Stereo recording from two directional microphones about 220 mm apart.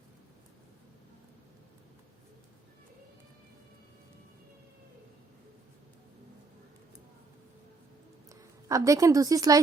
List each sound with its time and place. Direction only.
8.4 s a woman's voice: 15° right (ahead or behind)